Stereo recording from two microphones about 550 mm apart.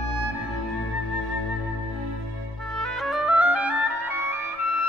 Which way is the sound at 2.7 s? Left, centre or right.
Centre.